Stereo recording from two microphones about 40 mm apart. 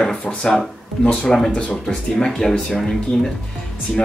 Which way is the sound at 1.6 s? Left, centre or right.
Left.